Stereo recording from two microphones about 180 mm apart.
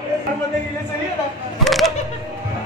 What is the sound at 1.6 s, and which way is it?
Speech, centre (ahead or behind).